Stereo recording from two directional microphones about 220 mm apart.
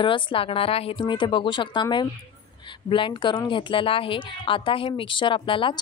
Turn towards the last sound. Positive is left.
turn(degrees=25)  # may be behind; listen again after turning